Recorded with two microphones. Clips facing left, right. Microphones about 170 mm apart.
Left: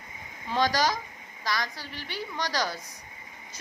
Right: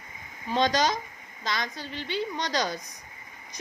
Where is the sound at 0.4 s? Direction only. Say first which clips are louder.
Right 1 dB; 20° right (ahead or behind).